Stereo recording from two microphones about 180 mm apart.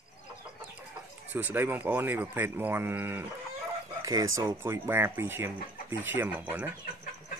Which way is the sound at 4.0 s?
20° right (ahead or behind).